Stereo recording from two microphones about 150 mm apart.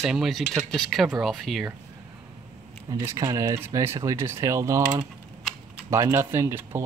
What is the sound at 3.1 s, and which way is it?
Speech, 20° right (ahead or behind).